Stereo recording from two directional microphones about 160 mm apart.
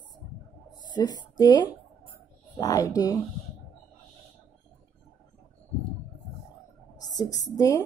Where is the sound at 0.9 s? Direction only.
25° left (ahead or behind).